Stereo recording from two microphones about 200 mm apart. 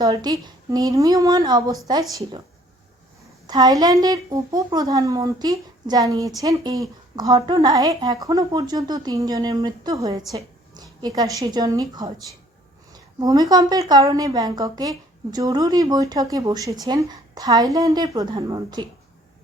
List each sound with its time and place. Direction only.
0.0 s a woman's voice: 20° right (ahead or behind)
3.4 s a woman's voice: 20° right (ahead or behind)